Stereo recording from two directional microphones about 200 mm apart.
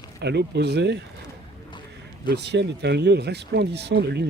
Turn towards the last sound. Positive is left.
turn(degrees=-55)  # may be behind; listen again after turning